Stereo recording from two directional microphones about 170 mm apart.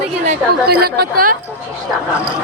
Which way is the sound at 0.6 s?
65° right (ahead or behind).